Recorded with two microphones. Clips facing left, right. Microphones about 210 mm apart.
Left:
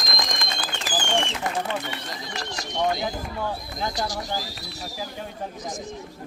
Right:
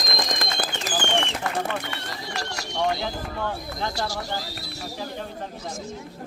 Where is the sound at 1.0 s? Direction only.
60° right (ahead or behind).